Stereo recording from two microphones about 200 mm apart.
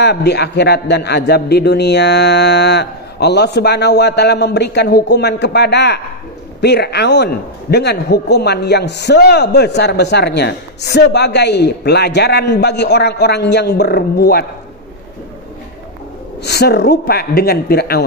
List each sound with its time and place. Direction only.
0.0 s a man's voice: 55° left (ahead or behind)
16.4 s a man's voice: 55° left (ahead or behind)